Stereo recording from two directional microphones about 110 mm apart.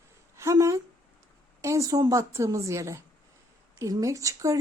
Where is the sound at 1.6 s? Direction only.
30° right (ahead or behind).